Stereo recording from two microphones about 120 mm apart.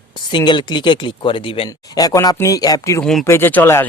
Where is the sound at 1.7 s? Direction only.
30° left (ahead or behind).